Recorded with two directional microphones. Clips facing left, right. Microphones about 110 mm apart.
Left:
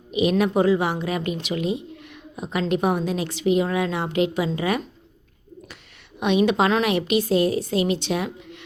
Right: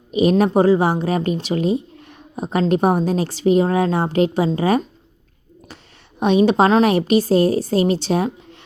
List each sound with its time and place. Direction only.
0.1 s a woman's voice: 40° right (ahead or behind)
6.1 s a woman's voice: 35° right (ahead or behind)